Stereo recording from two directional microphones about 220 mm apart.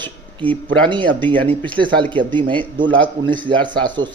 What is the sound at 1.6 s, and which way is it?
A man's voice, 20° right (ahead or behind).